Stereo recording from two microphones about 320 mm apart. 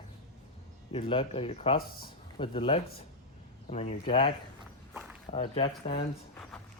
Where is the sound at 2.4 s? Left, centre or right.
Centre.